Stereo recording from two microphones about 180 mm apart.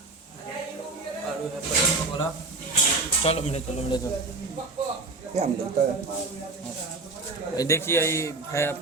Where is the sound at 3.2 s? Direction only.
35° left (ahead or behind).